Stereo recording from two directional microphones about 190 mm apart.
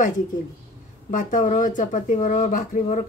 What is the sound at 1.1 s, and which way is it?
Speech, 45° left (ahead or behind).